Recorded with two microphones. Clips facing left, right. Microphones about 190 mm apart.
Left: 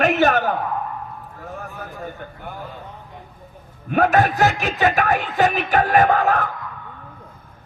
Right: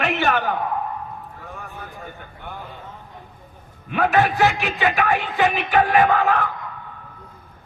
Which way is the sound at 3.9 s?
45° left (ahead or behind).